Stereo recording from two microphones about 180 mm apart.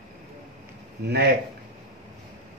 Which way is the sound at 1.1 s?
65° right (ahead or behind).